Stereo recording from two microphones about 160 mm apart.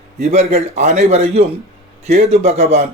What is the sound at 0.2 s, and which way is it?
A man's voice, 45° right (ahead or behind).